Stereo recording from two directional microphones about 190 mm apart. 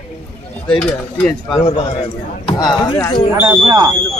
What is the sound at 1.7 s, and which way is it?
Speech, 30° left (ahead or behind).